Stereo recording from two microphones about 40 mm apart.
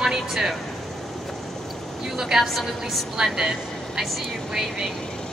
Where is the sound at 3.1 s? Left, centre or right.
Centre.